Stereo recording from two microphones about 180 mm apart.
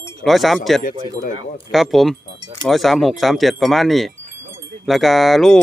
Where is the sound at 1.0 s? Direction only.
20° right (ahead or behind).